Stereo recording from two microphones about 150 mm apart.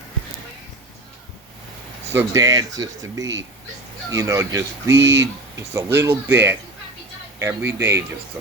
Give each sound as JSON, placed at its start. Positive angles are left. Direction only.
{"t": 2.1, "sound": "speech", "side_deg": -20}